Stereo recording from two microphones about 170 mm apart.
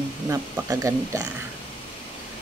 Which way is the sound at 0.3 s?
15° right (ahead or behind).